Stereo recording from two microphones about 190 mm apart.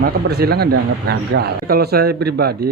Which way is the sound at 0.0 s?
55° right (ahead or behind).